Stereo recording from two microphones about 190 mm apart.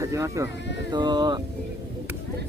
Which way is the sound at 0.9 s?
20° right (ahead or behind).